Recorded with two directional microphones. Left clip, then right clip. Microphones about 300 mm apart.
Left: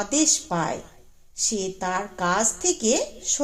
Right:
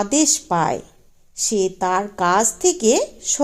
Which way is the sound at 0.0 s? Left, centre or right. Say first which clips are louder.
Right 4 dB; right.